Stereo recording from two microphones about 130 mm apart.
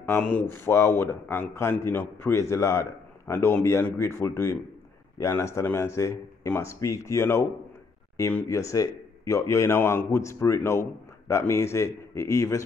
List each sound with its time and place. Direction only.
0.2 s speech: 10° left (ahead or behind)